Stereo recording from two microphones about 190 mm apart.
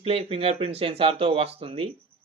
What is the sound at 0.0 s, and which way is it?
Speech, 30° right (ahead or behind).